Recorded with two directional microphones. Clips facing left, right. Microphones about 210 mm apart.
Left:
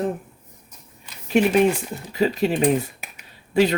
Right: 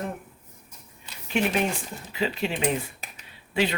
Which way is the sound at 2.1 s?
40° left (ahead or behind).